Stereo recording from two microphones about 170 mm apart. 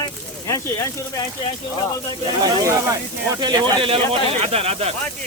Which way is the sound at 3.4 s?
25° right (ahead or behind).